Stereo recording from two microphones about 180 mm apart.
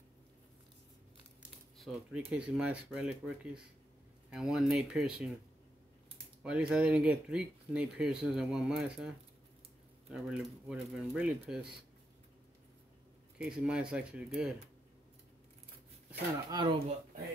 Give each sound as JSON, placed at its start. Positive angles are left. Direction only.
{"t": 1.8, "sound": "speech", "side_deg": -5}
{"t": 4.3, "sound": "speech", "side_deg": 0}
{"t": 6.4, "sound": "speech", "side_deg": -5}
{"t": 10.1, "sound": "speech", "side_deg": -5}
{"t": 13.4, "sound": "speech", "side_deg": -5}
{"t": 16.4, "sound": "speech", "side_deg": -25}